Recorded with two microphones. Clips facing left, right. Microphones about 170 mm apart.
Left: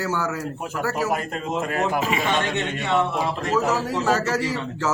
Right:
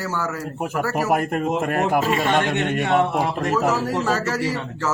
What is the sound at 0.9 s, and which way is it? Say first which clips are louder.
Speech: right 6 dB; 55° right (ahead or behind).